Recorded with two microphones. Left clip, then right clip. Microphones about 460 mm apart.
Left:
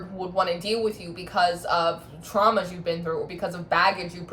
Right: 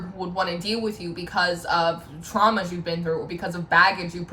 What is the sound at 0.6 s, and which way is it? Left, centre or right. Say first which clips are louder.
Speech: left 1 dB; centre.